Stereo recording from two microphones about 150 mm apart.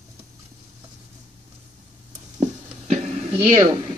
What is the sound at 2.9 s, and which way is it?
Music, 45° right (ahead or behind).